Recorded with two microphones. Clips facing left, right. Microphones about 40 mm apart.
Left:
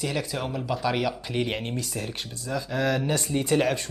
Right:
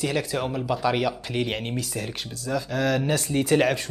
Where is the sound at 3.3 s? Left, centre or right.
Centre.